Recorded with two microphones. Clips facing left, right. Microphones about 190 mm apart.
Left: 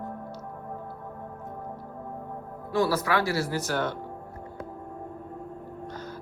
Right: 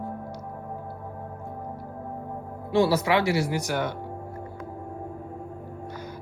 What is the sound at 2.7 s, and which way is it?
Speech, 25° right (ahead or behind).